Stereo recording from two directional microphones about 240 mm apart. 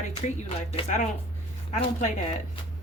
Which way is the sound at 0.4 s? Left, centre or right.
Left.